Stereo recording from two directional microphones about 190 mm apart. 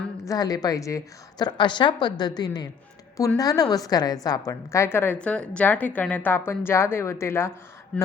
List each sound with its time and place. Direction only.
0.3 s a woman's voice: 20° left (ahead or behind)